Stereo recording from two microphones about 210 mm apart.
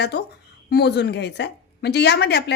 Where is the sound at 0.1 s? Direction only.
50° left (ahead or behind).